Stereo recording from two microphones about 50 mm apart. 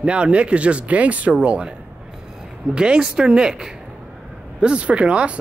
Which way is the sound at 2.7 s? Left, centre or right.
Centre.